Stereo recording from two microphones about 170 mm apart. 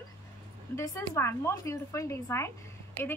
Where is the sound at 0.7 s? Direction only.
15° left (ahead or behind).